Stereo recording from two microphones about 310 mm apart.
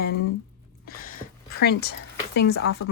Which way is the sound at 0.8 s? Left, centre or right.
Left.